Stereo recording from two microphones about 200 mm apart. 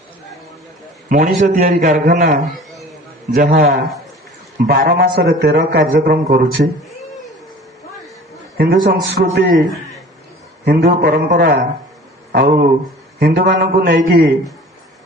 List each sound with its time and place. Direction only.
1.1 s a man's voice: 45° right (ahead or behind)
8.5 s a man's voice: 45° right (ahead or behind)
10.7 s a man's voice: 50° right (ahead or behind)